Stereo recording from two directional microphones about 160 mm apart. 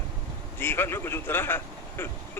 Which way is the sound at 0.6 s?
15° left (ahead or behind).